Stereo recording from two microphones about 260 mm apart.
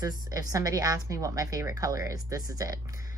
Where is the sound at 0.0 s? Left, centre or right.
Centre.